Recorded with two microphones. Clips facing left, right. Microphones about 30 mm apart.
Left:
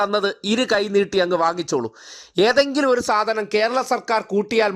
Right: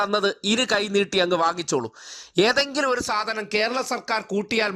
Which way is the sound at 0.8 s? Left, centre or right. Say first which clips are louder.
Left 4 dB; right.